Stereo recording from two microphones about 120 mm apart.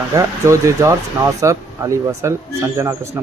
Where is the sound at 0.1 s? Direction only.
25° right (ahead or behind).